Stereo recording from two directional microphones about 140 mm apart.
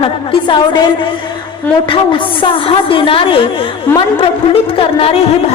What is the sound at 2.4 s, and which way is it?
Speech, 40° left (ahead or behind).